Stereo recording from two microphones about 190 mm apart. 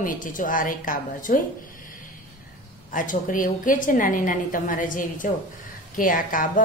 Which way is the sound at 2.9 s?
45° left (ahead or behind).